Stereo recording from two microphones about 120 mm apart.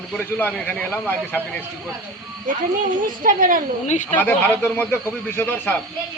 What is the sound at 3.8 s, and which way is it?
Speech, 85° left.